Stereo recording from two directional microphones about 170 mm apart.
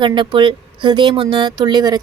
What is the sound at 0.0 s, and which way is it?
Speech, 25° right (ahead or behind).